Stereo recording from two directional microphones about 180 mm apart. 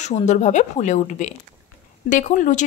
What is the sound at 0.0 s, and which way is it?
Speech, 40° left (ahead or behind).